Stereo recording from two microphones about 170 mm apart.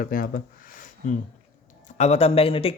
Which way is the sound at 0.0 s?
55° left (ahead or behind).